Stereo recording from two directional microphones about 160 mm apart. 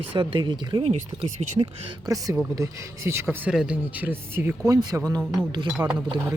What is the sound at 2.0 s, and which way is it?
Speech, 20° right (ahead or behind).